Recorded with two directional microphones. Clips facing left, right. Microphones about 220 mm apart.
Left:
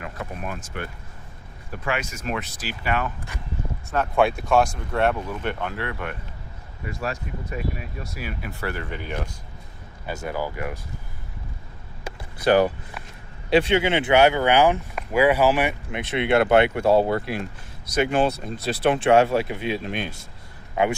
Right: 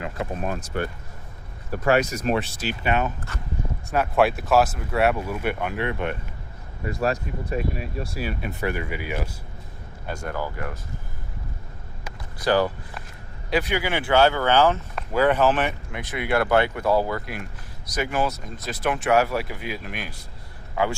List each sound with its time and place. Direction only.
0.0 s speech: 30° right (ahead or behind)
3.2 s speech: 15° left (ahead or behind)
3.9 s speech: 5° right (ahead or behind); by 6.1 s 20° right (ahead or behind)
6.8 s speech: 40° right (ahead or behind); by 9.3 s 10° right (ahead or behind)
10.1 s speech: 5° left (ahead or behind)
12.0 s a sound: 20° left (ahead or behind)
13.5 s speech: 30° left (ahead or behind); by 16.0 s 10° left (ahead or behind)
16.0 s speech: 25° left (ahead or behind)